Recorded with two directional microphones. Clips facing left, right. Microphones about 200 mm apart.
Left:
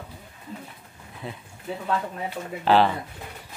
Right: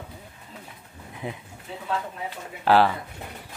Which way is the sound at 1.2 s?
15° right (ahead or behind).